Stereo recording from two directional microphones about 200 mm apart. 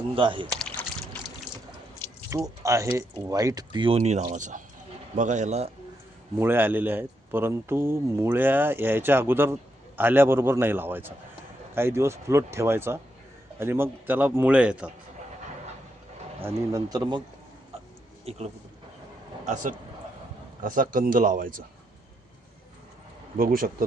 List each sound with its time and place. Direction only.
0.1 s speech: 25° right (ahead or behind)
0.5 s a sound: 5° left (ahead or behind)
2.3 s a man's voice: 15° right (ahead or behind); by 5.7 s 35° right (ahead or behind)
6.4 s a man's voice: 10° right (ahead or behind)
16.4 s speech: 15° right (ahead or behind)
18.3 s a man's voice: 30° right (ahead or behind)
20.6 s speech: 40° right (ahead or behind)
23.4 s speech: 45° right (ahead or behind)